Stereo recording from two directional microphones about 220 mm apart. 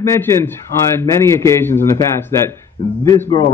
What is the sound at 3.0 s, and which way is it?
Speech, 20° left (ahead or behind).